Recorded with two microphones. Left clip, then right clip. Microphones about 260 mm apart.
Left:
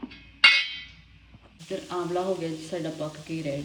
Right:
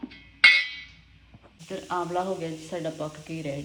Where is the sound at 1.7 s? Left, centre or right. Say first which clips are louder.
Right 1 dB; centre.